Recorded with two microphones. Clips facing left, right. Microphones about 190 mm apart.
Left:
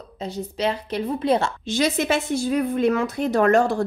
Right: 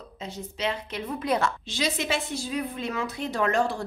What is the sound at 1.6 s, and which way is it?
A woman's voice, 50° left (ahead or behind).